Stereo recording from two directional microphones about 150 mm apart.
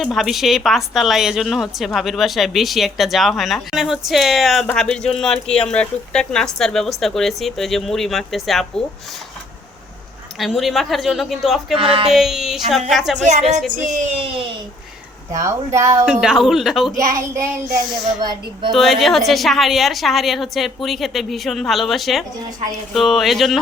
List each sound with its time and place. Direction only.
0.0 s speech: centre (ahead or behind)
10.3 s speech: centre (ahead or behind)
11.8 s speech: 40° right (ahead or behind)
12.0 s speech: centre (ahead or behind)
13.1 s speech: 50° right (ahead or behind)
15.3 s speech: 20° right (ahead or behind)
16.2 s speech: centre (ahead or behind)
18.7 s speech: centre (ahead or behind)